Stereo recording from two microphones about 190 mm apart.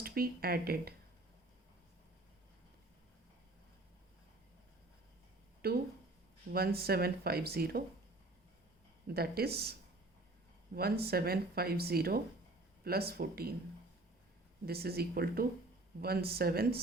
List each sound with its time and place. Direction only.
0.0 s speech: 50° right (ahead or behind)
5.6 s speech: 55° right (ahead or behind)
9.0 s speech: 55° right (ahead or behind)
10.8 s speech: 55° right (ahead or behind)
14.7 s speech: 55° right (ahead or behind)